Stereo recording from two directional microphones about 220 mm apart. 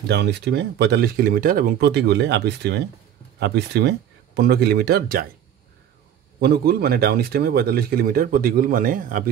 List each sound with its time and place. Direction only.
0.1 s speech: 50° right (ahead or behind)
6.4 s speech: 45° right (ahead or behind)